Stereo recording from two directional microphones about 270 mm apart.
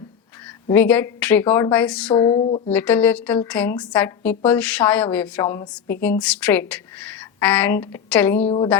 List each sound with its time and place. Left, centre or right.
0.4 s a woman's voice: centre; by 2.7 s left
2.7 s a woman's voice: centre
8.4 s speech: centre